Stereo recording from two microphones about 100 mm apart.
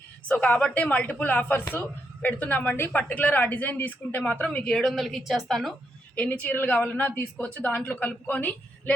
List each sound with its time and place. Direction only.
0.3 s a woman's voice: 15° left (ahead or behind)
6.1 s a woman's voice: 10° left (ahead or behind)